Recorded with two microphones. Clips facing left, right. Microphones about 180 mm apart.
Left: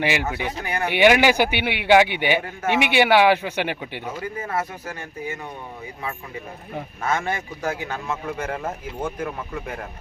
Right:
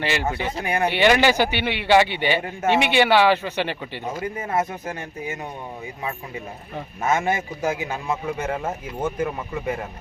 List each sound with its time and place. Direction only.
0.0 s speech: 10° left (ahead or behind)
0.5 s speech: 25° right (ahead or behind)
0.9 s speech: 10° left (ahead or behind)
4.4 s speech: 25° right (ahead or behind)
7.0 s a man's voice: 15° right (ahead or behind)